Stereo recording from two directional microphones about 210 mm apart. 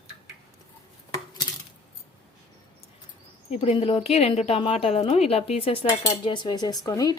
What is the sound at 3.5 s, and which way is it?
Speech, 30° left (ahead or behind).